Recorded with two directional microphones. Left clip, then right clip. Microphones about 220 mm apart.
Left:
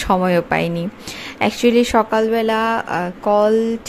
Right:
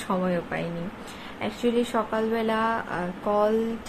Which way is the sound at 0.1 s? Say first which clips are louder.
Left 11 dB; 45° left (ahead or behind).